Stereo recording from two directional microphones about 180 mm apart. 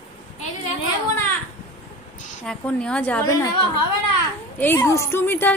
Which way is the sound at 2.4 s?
5° left (ahead or behind).